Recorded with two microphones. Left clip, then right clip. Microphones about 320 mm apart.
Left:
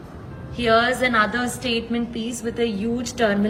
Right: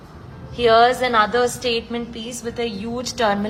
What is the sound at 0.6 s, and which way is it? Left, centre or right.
A woman's voice, centre.